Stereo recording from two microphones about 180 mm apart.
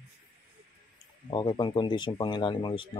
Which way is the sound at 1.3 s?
25° left (ahead or behind).